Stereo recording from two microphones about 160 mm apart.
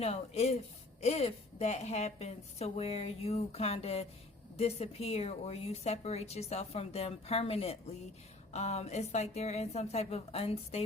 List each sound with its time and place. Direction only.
0.0 s a woman's voice: 40° left (ahead or behind)